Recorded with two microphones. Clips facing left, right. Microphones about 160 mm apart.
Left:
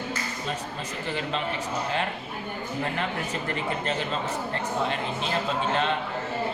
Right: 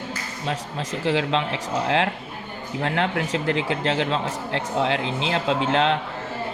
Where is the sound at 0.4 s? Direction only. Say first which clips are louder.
Right 4 dB; 90° right.